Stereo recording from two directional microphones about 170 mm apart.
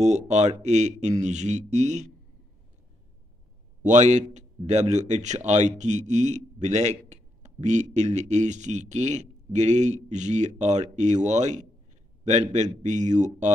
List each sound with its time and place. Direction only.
0.0 s speech: 45° right (ahead or behind)
3.8 s speech: 45° right (ahead or behind)